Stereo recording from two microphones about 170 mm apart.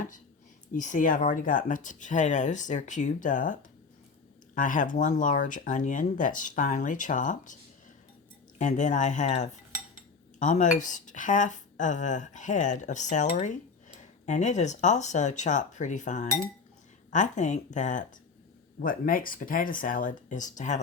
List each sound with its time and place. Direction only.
0.7 s speech: 50° left (ahead or behind)
8.5 s speech: 45° left (ahead or behind)